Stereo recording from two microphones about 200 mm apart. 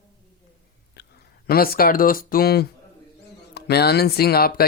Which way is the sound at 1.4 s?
50° left (ahead or behind).